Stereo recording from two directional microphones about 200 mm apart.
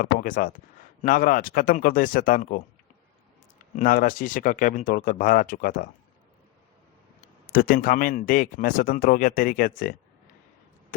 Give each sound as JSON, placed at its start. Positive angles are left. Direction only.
{"t": 0.0, "sound": "speech", "side_deg": 45}
{"t": 3.8, "sound": "speech", "side_deg": 45}
{"t": 7.5, "sound": "speech", "side_deg": 45}